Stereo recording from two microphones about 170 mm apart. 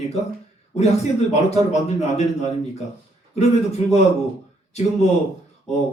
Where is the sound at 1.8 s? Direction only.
40° left (ahead or behind).